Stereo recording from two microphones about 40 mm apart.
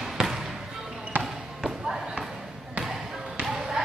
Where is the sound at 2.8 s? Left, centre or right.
Centre.